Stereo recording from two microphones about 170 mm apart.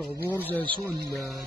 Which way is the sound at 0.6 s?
30° right (ahead or behind).